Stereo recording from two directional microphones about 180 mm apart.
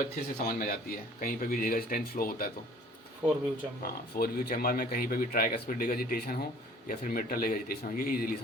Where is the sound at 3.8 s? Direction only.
55° left (ahead or behind).